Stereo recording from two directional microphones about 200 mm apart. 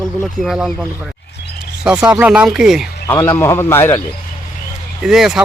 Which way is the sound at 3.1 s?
10° left (ahead or behind).